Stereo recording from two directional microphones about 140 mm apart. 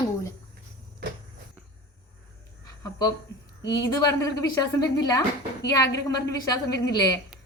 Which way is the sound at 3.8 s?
25° left (ahead or behind).